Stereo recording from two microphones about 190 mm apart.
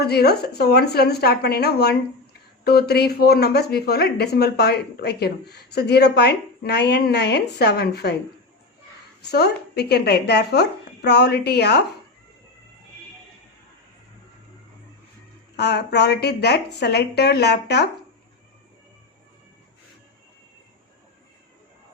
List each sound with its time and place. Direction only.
0.0 s speech: 55° left (ahead or behind)
9.3 s speech: 60° left (ahead or behind)
15.5 s speech: 60° left (ahead or behind)